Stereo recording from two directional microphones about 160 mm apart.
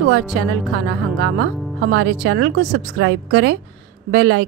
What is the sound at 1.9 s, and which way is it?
A woman's voice, 90° right.